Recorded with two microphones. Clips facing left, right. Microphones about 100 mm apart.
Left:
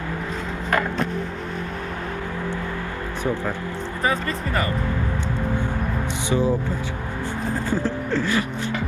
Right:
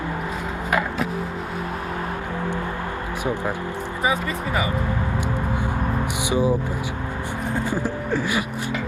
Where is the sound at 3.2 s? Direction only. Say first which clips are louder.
Even; 15° right (ahead or behind).